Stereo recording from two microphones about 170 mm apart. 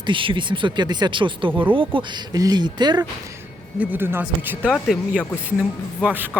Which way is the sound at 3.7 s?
10° right (ahead or behind).